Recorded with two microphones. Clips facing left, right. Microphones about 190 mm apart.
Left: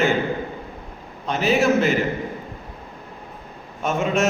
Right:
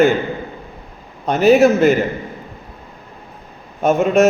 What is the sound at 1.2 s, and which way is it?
Speech, 40° right (ahead or behind).